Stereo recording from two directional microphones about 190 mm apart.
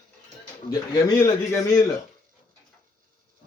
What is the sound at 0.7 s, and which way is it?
A man's voice, 20° left (ahead or behind).